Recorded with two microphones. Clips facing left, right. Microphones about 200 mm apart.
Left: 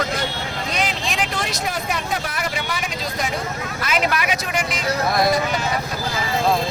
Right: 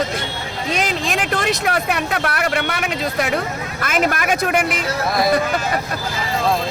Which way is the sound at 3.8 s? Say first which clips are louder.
Right 3 dB; 50° right (ahead or behind).